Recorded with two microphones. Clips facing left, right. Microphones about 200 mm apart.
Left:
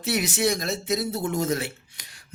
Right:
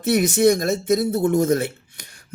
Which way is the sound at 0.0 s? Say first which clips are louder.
Right 8 dB; 50° right (ahead or behind).